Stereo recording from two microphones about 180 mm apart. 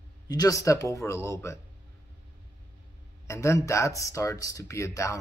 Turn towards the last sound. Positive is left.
turn(degrees=15)  # may be behind; listen again after turning